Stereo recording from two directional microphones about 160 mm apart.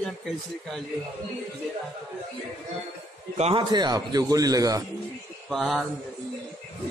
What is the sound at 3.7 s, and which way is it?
A man's voice, 25° right (ahead or behind).